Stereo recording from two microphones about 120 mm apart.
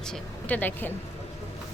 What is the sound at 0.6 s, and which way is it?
Speech, 15° left (ahead or behind).